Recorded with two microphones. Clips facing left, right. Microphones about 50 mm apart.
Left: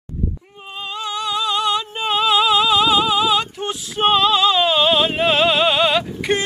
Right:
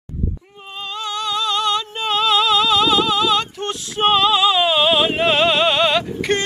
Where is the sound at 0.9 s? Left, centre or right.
Centre.